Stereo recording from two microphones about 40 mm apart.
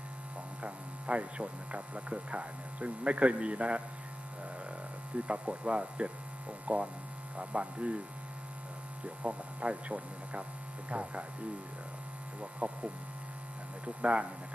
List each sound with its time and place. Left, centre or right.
0.3 s speech: right
4.4 s hum: right
6.5 s speech: right
9.0 s speech: right
12.4 s speech: right